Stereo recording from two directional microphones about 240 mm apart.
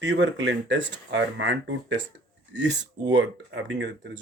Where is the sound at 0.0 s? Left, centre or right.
Right.